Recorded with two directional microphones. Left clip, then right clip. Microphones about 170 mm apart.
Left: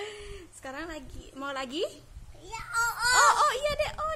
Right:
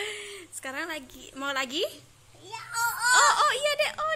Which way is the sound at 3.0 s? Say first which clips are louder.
Right 1 dB; 10° left (ahead or behind).